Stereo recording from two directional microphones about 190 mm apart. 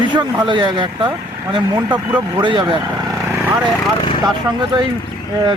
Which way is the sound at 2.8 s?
15° right (ahead or behind).